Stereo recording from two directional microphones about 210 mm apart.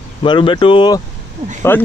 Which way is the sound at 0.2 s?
25° left (ahead or behind).